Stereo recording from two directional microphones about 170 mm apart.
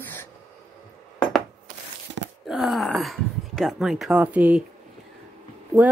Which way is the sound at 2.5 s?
Centre (ahead or behind).